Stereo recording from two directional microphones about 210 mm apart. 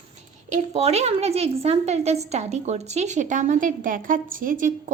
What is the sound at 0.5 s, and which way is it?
A woman's voice, 30° right (ahead or behind).